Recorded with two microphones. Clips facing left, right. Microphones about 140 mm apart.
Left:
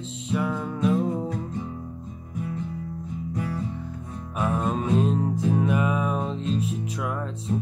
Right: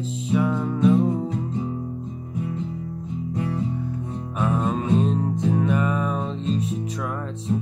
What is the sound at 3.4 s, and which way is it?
Music, 20° right (ahead or behind).